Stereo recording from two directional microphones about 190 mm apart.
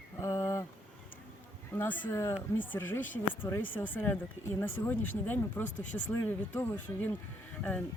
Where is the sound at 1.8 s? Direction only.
10° left (ahead or behind).